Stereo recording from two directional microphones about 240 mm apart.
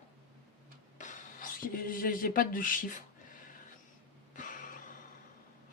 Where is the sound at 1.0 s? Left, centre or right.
Left.